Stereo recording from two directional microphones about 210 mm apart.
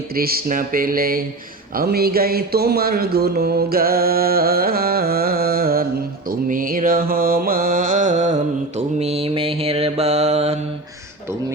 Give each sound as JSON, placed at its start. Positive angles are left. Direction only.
{"t": 0.2, "sound": "speech", "side_deg": -45}
{"t": 6.5, "sound": "mantra", "side_deg": -40}